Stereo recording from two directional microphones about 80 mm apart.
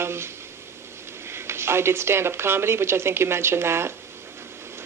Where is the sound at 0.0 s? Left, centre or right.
Right.